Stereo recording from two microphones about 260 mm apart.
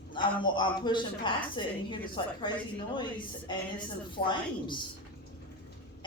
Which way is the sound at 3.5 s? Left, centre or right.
Centre.